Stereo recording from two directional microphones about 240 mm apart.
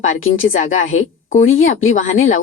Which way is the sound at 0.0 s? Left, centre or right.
Left.